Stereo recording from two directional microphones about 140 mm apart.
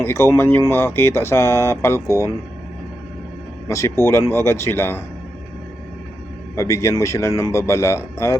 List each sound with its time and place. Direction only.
0.0 s speech: 15° left (ahead or behind)
3.7 s speech: 20° left (ahead or behind)
6.6 s speech: 20° left (ahead or behind)